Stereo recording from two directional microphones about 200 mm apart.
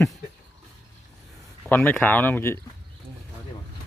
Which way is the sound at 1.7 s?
5° left (ahead or behind).